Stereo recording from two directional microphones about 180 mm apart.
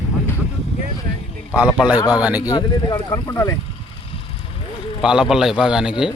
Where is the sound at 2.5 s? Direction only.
20° left (ahead or behind).